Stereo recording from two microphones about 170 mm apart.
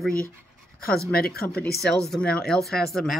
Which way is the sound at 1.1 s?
65° left (ahead or behind).